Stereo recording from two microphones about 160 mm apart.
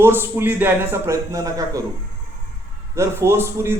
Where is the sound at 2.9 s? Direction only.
15° right (ahead or behind).